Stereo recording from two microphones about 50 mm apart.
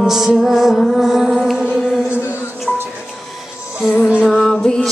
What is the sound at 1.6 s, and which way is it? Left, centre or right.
Chant, centre.